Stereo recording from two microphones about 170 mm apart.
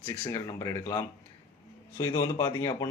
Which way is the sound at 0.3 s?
20° left (ahead or behind).